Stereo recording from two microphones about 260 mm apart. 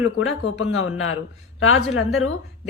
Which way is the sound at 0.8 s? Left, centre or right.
Left.